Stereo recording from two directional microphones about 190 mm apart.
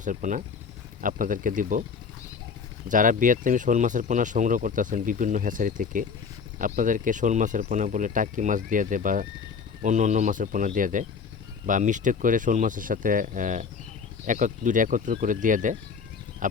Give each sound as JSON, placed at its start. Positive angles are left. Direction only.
{"t": 0.0, "sound": "speech", "side_deg": -40}
{"t": 2.9, "sound": "speech", "side_deg": -45}